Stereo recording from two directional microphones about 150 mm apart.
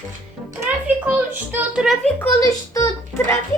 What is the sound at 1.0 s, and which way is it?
Speech, 10° right (ahead or behind).